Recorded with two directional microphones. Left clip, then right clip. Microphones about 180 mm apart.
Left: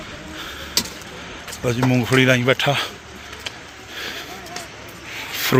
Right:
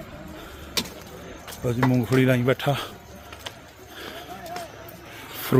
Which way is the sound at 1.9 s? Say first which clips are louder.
Left 7 dB; 5° right (ahead or behind).